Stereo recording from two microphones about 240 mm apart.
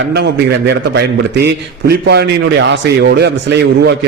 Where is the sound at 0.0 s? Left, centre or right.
Right.